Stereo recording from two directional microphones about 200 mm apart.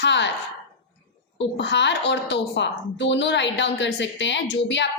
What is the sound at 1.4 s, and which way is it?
A woman's voice, 60° left (ahead or behind).